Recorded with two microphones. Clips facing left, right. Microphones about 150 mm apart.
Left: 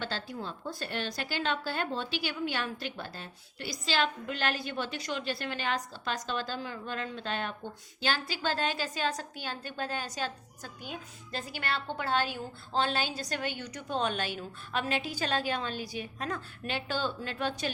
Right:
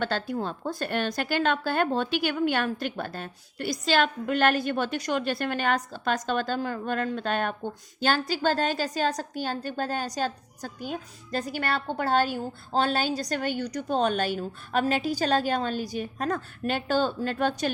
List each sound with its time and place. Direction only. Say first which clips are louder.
0.0 s a woman's voice: right 8 dB; 55° right (ahead or behind)